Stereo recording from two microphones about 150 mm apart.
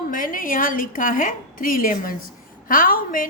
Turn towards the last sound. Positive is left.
turn(degrees=65)  # may be behind; listen again after turning